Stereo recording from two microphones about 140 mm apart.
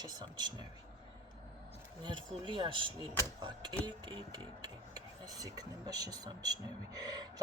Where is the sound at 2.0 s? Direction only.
35° right (ahead or behind).